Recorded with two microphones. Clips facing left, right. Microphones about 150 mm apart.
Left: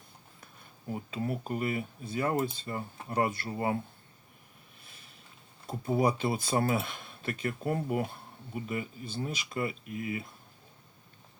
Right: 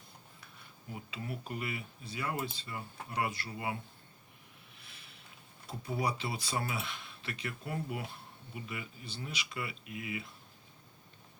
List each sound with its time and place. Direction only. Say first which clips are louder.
0.9 s speech: left 8 dB; 45° left (ahead or behind)
5.6 s speech: left 7 dB; 50° left (ahead or behind)